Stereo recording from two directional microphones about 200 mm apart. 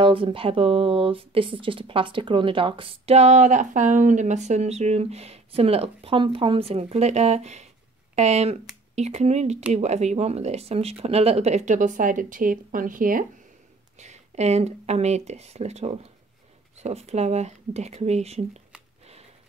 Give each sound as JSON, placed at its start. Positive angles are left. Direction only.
{"t": 0.0, "sound": "speech", "side_deg": -25}